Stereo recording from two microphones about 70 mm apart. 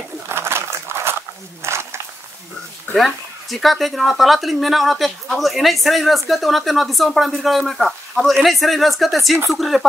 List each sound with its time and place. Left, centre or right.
0.3 s crumpling: right
1.6 s a sound: right
3.0 s speech: centre